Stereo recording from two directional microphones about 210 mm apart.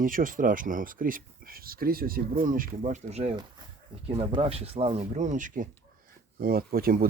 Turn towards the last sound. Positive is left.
turn(degrees=-45)  # may be behind; listen again after turning